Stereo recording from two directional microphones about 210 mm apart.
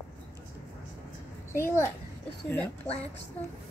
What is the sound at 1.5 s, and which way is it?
A child's voice, 10° left (ahead or behind).